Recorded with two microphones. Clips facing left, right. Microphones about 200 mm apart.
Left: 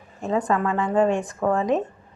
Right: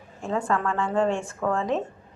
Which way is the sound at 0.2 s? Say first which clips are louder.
Left 3 dB; 20° left (ahead or behind).